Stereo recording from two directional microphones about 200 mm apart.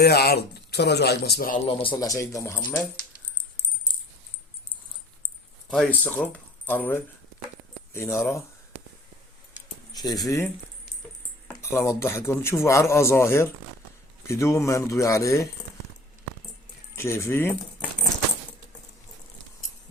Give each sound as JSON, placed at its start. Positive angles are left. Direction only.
{"t": 0.0, "sound": "speech", "side_deg": 55}
{"t": 1.6, "sound": "a man's voice", "side_deg": 25}
{"t": 5.6, "sound": "a man's voice", "side_deg": 5}
{"t": 9.9, "sound": "speech", "side_deg": 20}
{"t": 11.5, "sound": "a man's voice", "side_deg": 15}
{"t": 16.9, "sound": "speech", "side_deg": 15}